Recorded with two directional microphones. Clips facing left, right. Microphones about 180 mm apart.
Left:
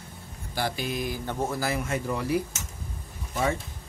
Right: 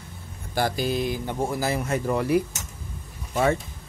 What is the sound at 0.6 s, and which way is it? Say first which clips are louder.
Speech: right 5 dB; 40° right (ahead or behind).